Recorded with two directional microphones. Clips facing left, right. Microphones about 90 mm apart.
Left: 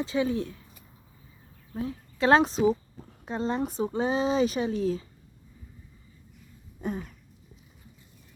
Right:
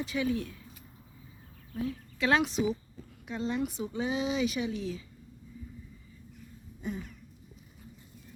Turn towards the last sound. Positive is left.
turn(degrees=50)  # may be behind; listen again after turning